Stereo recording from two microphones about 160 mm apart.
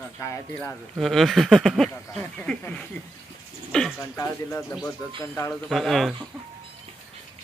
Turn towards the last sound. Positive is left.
turn(degrees=0)  # may be behind; listen again after turning